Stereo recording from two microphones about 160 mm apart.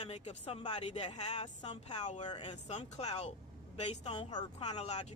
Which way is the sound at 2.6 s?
45° left (ahead or behind).